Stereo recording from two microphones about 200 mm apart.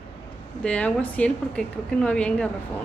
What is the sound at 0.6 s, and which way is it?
A woman's voice, 5° left (ahead or behind).